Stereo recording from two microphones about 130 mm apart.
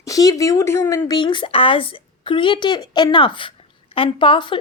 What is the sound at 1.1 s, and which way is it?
A woman's voice, 35° left (ahead or behind).